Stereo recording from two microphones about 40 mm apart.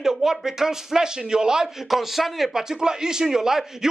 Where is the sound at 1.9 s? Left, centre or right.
Centre.